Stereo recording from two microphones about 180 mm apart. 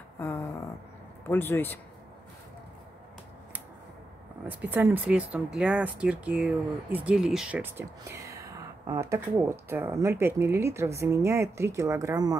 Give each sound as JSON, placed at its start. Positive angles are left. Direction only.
{"t": 0.2, "sound": "a sound", "side_deg": 15}
{"t": 1.2, "sound": "a man's voice", "side_deg": 10}
{"t": 4.5, "sound": "speech", "side_deg": -10}